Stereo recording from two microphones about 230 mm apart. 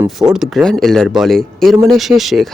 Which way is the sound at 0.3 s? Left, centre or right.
Centre.